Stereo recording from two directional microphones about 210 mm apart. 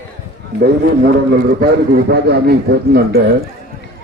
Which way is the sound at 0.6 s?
50° right (ahead or behind).